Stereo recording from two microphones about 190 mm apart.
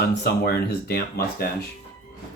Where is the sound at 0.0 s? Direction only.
60° left (ahead or behind).